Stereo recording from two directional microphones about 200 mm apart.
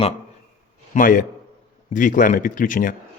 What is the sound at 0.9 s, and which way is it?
Speech, 45° left (ahead or behind).